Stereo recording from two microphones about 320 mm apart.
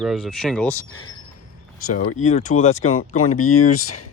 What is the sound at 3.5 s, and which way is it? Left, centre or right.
Speech, left.